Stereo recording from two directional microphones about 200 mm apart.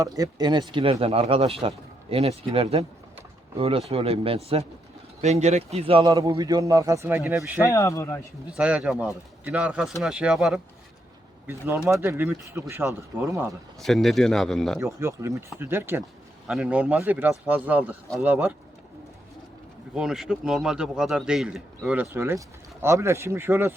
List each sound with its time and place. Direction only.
0.0 s a man's voice: 20° right (ahead or behind)
7.6 s speech: 15° left (ahead or behind)
8.4 s a man's voice: 5° right (ahead or behind)
13.7 s a man's voice: centre (ahead or behind)
14.8 s speech: 15° right (ahead or behind)
19.9 s a man's voice: 5° right (ahead or behind)